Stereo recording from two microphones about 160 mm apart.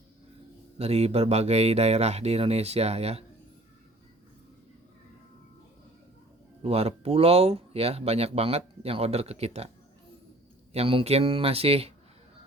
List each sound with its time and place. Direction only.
0.8 s speech: 40° right (ahead or behind)
6.6 s speech: 40° right (ahead or behind)